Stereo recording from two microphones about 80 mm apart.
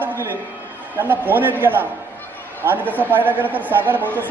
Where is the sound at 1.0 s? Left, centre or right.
Right.